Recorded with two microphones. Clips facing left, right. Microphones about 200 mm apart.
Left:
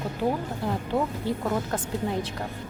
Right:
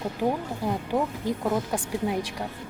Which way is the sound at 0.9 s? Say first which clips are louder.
Left 1 dB; 10° right (ahead or behind).